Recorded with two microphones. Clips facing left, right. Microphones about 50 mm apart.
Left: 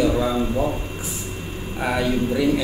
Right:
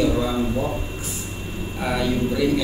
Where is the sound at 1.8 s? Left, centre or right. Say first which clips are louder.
Left 1 dB; left.